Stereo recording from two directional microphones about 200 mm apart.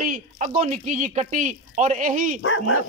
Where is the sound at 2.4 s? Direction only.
65° left (ahead or behind).